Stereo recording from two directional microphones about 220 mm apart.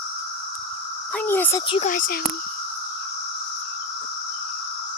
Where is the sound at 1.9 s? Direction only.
40° left (ahead or behind).